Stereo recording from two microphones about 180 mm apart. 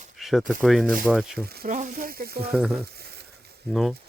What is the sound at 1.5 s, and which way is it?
Speech, 60° right (ahead or behind).